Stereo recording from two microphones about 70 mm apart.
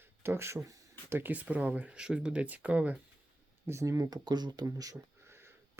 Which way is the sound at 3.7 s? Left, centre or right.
Right.